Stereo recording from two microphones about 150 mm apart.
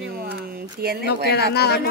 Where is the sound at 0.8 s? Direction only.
90° right.